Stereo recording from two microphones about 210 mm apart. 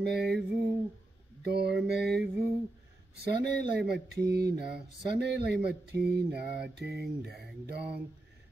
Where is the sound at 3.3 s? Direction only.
50° right (ahead or behind).